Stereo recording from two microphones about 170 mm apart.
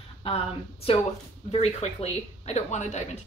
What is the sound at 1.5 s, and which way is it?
Speech, 40° left (ahead or behind).